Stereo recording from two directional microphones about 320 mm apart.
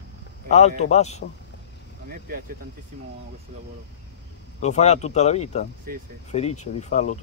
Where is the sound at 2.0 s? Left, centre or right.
Right.